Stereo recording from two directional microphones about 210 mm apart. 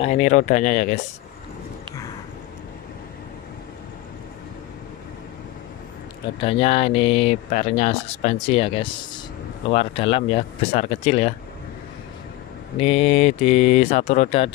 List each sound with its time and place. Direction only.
0.0 s speech: 30° left (ahead or behind)
6.4 s speech: 25° left (ahead or behind)
12.8 s speech: 30° left (ahead or behind)